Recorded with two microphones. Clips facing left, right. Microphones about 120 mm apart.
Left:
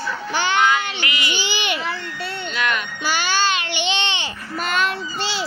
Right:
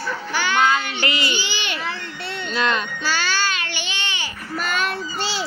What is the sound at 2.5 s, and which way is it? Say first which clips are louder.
Speech: right 3 dB; 30° right (ahead or behind).